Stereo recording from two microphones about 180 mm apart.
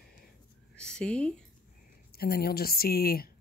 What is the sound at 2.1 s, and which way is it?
Speech, 60° left (ahead or behind).